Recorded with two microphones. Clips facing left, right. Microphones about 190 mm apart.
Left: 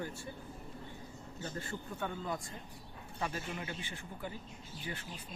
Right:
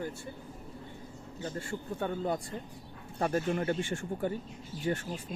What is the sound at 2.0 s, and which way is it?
Speech, 35° right (ahead or behind).